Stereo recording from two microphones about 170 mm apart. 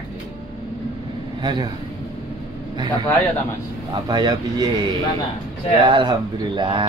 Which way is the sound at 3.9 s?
25° right (ahead or behind).